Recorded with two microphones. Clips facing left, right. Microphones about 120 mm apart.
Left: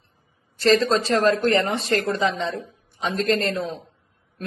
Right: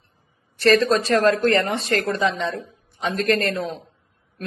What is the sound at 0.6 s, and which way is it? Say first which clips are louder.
Speech: right 1 dB; 25° left (ahead or behind).